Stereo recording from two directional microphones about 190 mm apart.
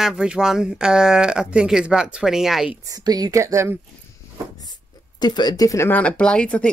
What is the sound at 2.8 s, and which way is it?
Speech, 20° right (ahead or behind).